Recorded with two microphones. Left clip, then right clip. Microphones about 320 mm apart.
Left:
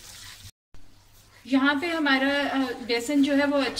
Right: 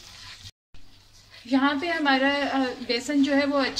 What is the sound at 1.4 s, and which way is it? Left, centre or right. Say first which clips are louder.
Speech: even; centre.